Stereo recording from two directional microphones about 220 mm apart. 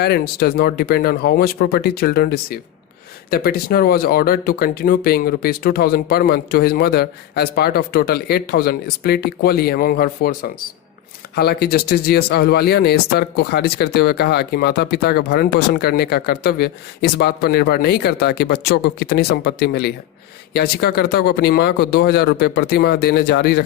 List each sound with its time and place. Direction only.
0.0 s speech: 45° left (ahead or behind)
11.3 s speech: 45° left (ahead or behind)